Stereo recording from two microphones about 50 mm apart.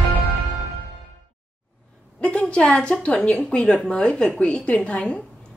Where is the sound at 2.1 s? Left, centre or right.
Left.